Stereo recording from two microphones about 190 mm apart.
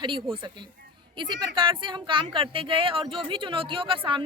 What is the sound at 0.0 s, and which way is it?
Speech, 25° right (ahead or behind).